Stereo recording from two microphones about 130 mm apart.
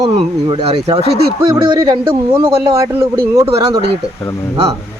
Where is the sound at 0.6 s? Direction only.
50° right (ahead or behind).